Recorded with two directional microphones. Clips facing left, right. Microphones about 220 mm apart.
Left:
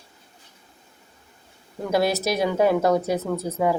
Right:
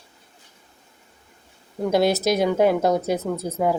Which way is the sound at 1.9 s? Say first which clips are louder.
Right 2 dB; 20° right (ahead or behind).